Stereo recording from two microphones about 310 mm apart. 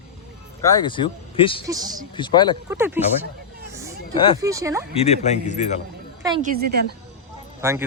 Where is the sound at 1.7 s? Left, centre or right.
Centre.